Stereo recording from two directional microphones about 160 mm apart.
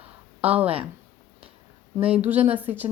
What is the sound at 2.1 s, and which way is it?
Speech, 10° right (ahead or behind).